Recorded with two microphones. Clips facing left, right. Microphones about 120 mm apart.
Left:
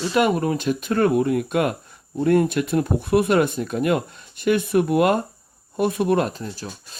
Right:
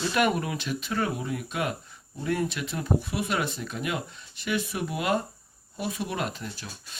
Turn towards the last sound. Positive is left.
turn(degrees=40)  # may be behind; listen again after turning